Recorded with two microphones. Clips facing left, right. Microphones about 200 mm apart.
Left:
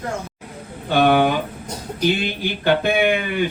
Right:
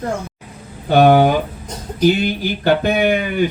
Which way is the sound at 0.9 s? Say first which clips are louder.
Right 5 dB; 40° right (ahead or behind).